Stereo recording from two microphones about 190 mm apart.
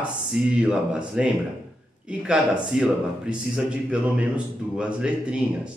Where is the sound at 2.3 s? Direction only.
5° right (ahead or behind).